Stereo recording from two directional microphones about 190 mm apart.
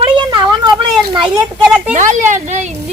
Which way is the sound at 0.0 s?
25° right (ahead or behind).